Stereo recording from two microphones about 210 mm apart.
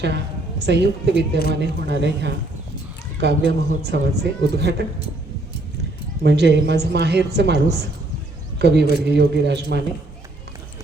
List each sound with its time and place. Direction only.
0.6 s a woman's voice: 55° right (ahead or behind)
6.2 s a woman's voice: 55° right (ahead or behind)